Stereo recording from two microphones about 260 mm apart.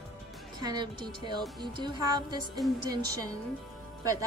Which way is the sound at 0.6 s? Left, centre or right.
Centre.